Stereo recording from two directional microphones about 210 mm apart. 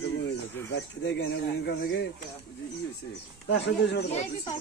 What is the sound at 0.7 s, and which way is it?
Speech, 55° left (ahead or behind).